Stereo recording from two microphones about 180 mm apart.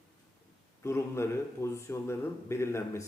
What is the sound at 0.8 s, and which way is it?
A man's voice, 15° left (ahead or behind).